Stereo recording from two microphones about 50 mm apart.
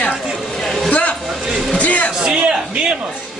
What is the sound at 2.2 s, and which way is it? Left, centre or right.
Speech, centre.